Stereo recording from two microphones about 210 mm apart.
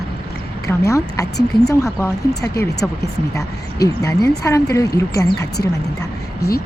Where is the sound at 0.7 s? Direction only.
15° left (ahead or behind).